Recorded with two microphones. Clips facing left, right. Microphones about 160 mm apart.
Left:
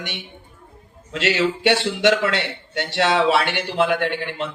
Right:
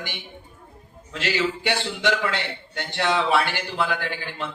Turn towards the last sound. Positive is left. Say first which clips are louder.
# left 7 dB
turn(degrees=70)  # may be behind; listen again after turning